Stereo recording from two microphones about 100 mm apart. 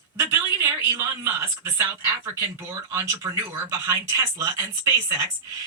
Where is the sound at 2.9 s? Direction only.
30° right (ahead or behind).